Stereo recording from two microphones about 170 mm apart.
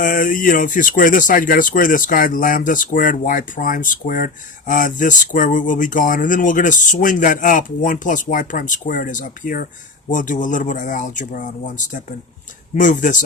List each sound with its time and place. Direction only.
0.0 s speech: 55° left (ahead or behind)